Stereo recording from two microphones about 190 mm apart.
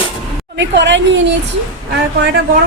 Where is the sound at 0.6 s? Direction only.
70° right (ahead or behind).